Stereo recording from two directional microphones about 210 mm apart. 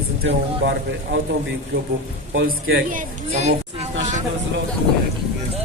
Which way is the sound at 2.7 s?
40° right (ahead or behind).